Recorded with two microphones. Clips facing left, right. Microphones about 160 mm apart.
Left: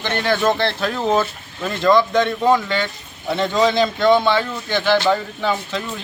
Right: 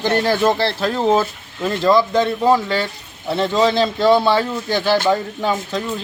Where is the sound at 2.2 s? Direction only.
30° right (ahead or behind).